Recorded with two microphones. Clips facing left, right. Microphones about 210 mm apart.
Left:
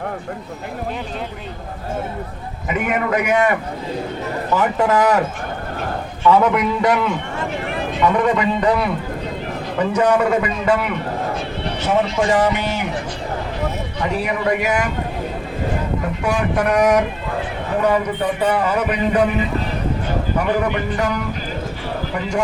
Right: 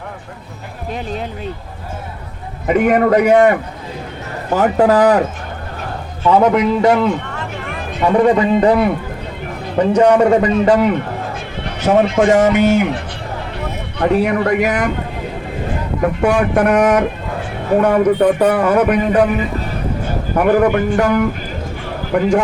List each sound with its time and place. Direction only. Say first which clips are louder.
2.6 s a man's voice: right 8 dB; 50° right (ahead or behind)
3.1 s a man's voice: right 6 dB; 35° right (ahead or behind)
4.5 s a man's voice: right 5 dB; 40° right (ahead or behind)
6.2 s a man's voice: right 3 dB; 30° right (ahead or behind)
9.7 s a man's voice: right 6 dB; 30° right (ahead or behind)
11.9 s a man's voice: right 6 dB; 45° right (ahead or behind)
14.0 s speech: right 7 dB; 55° right (ahead or behind)
16.2 s speech: right 5 dB; 55° right (ahead or behind)
20.4 s a man's voice: right 10 dB; 50° right (ahead or behind)